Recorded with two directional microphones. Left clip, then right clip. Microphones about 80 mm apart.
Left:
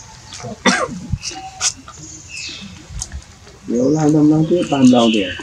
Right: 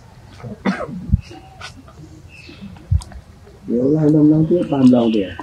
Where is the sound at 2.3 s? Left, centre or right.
Centre.